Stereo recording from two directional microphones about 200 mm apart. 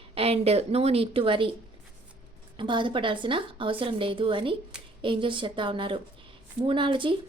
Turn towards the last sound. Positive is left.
turn(degrees=-25)  # may be behind; listen again after turning